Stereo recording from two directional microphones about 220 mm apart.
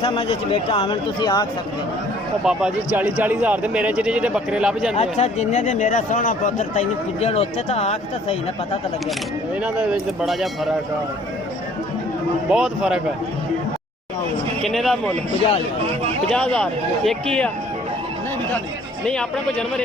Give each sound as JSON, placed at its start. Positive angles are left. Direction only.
{"t": 0.0, "sound": "speech", "side_deg": 25}
{"t": 2.4, "sound": "speech", "side_deg": -5}
{"t": 4.9, "sound": "speech", "side_deg": 30}
{"t": 9.6, "sound": "speech", "side_deg": -5}
{"t": 12.5, "sound": "speech", "side_deg": -5}
{"t": 14.6, "sound": "speech", "side_deg": 0}
{"t": 16.3, "sound": "speech", "side_deg": 5}
{"t": 19.0, "sound": "speech", "side_deg": 5}